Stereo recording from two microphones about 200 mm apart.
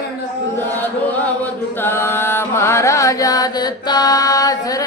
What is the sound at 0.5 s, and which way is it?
Chant, 10° left (ahead or behind).